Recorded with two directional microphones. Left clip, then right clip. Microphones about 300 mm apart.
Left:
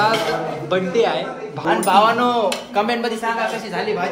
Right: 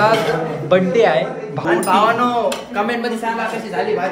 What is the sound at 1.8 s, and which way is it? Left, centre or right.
Speech, left.